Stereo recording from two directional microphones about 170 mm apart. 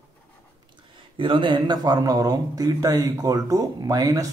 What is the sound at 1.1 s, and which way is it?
Speech, 30° right (ahead or behind).